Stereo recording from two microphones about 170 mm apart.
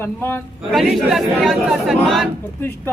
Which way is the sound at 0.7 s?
Centre (ahead or behind).